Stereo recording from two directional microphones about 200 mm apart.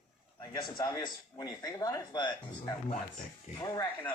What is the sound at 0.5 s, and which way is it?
A man's voice, 20° left (ahead or behind).